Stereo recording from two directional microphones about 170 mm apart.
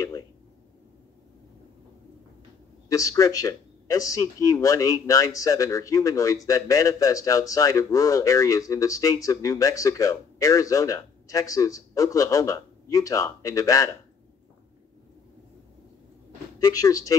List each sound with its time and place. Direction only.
2.9 s speech: 20° left (ahead or behind)
16.5 s speech: 20° left (ahead or behind)